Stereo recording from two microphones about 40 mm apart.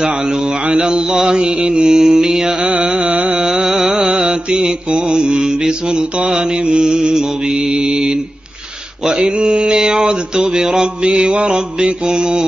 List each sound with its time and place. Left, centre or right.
0.0 s mantra: right
2.6 s music: right
3.3 s mantra: centre
9.2 s mantra: right